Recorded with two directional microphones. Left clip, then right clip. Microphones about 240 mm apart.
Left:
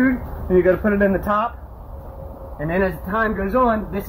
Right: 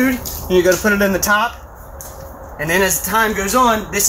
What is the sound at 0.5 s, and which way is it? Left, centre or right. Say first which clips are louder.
Speech: right 3 dB; centre.